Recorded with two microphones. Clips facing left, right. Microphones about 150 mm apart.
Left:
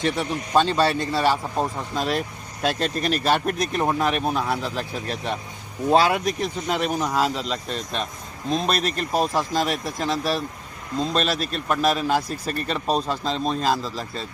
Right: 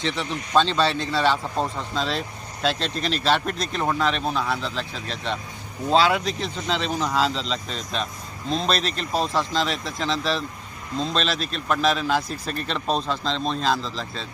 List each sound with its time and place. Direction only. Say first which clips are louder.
0.2 s speech: right 2 dB; 15° left (ahead or behind)
2.6 s speech: left 2 dB; 50° left (ahead or behind)
3.2 s speech: even; 10° left (ahead or behind)
9.5 s speech: left 2 dB; 50° left (ahead or behind)
10.1 s speech: left 1 dB; 10° left (ahead or behind)